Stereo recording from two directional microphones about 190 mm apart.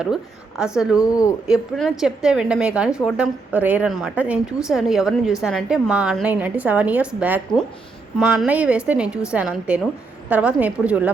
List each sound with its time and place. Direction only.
0.0 s a woman's voice: 5° right (ahead or behind)
1.0 s speech: 20° left (ahead or behind)
1.5 s a woman's voice: centre (ahead or behind)